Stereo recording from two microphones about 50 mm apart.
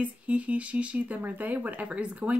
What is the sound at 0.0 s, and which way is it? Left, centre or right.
Speech, right.